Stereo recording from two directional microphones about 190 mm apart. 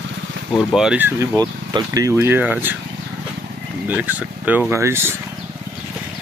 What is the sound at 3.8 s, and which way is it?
Speech, 10° right (ahead or behind).